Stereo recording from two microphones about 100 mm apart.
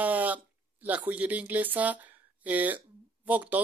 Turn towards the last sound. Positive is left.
turn(degrees=-15)  # may be behind; listen again after turning